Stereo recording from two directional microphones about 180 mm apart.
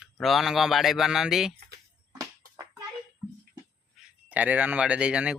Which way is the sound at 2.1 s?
20° right (ahead or behind).